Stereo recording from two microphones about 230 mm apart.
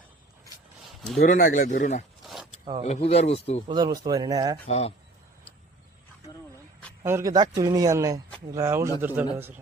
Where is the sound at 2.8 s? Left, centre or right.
Left.